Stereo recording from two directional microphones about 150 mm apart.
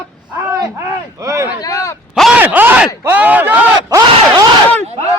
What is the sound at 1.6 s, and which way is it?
Speech, 25° left (ahead or behind).